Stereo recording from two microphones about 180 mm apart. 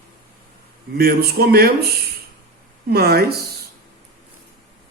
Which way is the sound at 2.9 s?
60° right (ahead or behind).